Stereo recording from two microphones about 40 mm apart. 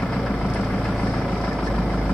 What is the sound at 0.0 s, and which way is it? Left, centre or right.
Vehicle, centre.